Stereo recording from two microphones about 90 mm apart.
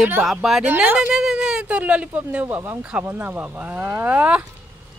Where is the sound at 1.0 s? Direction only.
5° right (ahead or behind).